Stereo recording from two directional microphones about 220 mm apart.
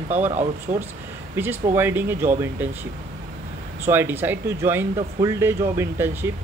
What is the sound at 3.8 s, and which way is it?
Speech, 10° right (ahead or behind).